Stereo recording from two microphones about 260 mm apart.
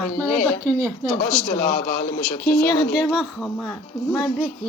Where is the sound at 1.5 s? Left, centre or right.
Left.